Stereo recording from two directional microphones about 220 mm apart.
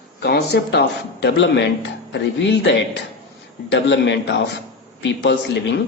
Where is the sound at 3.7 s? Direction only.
50° left (ahead or behind).